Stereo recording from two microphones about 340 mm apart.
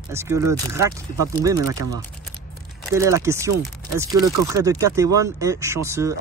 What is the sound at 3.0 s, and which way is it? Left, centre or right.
Speech, centre.